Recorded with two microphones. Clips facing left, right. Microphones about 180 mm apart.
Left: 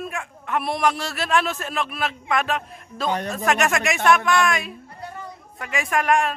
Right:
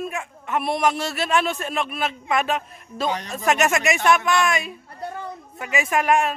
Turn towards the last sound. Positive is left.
turn(degrees=-5)  # may be behind; listen again after turning